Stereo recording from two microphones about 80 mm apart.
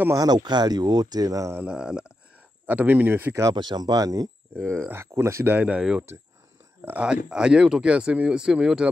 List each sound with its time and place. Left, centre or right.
0.1 s speech: right
1.7 s speech: centre
2.6 s speech: right
3.5 s speech: right
4.6 s speech: right
5.5 s speech: centre
7.1 s speech: centre